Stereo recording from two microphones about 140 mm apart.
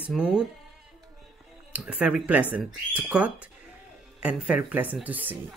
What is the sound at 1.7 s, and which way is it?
Speech, 10° right (ahead or behind).